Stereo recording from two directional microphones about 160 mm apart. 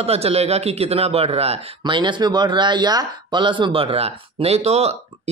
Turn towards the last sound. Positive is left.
turn(degrees=-40)  # may be behind; listen again after turning